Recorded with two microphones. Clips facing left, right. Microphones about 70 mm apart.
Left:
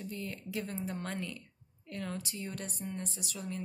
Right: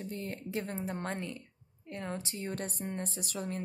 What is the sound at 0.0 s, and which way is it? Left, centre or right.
A woman's voice, right.